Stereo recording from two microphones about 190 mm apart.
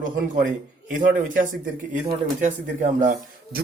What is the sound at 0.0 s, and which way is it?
A man's voice, 45° right (ahead or behind).